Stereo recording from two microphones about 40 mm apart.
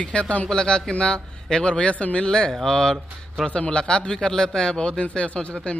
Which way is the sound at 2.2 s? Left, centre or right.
Left.